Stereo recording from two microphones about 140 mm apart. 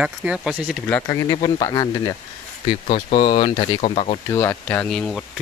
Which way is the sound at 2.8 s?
50° left (ahead or behind).